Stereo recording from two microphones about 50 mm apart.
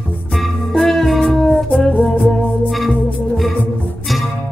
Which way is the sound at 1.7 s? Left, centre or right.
Centre.